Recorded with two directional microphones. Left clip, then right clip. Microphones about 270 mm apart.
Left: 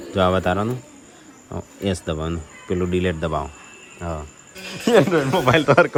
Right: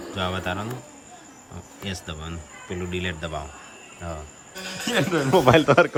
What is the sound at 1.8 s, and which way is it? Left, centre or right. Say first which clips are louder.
Speech: left 9 dB; centre.